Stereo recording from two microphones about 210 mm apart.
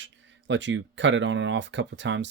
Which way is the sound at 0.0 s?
60° right (ahead or behind).